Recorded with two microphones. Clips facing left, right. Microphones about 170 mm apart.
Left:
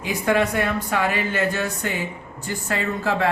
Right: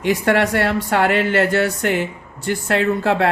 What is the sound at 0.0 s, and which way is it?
Speech, 80° right.